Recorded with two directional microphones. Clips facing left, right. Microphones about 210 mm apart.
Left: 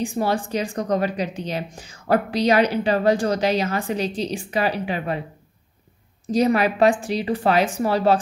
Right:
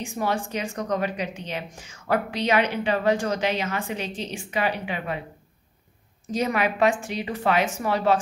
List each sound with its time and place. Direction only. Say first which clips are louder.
0.0 s speech: left 4 dB; 35° left (ahead or behind)
6.2 s speech: left 6 dB; 35° left (ahead or behind)